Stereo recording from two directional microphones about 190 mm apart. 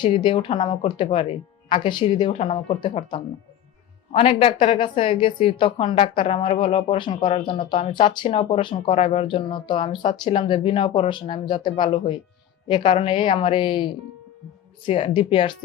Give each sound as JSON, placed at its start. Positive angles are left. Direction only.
{"t": 0.0, "sound": "speech", "side_deg": 25}